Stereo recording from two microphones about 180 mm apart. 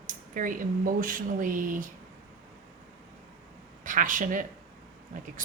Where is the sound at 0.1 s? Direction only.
50° right (ahead or behind).